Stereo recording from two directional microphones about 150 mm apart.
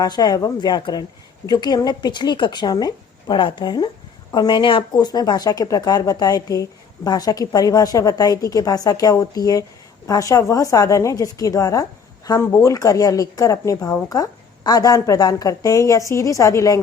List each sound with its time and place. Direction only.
0.0 s a woman's voice: 25° left (ahead or behind)